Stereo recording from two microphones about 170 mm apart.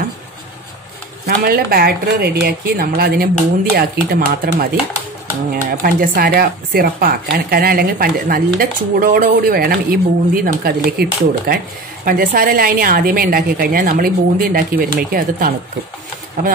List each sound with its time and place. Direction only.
1.2 s speech: 65° right (ahead or behind)